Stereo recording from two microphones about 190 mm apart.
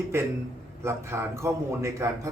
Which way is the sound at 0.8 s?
15° right (ahead or behind).